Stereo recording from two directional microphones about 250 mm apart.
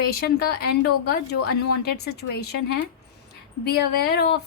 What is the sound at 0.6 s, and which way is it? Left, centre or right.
Speech, left.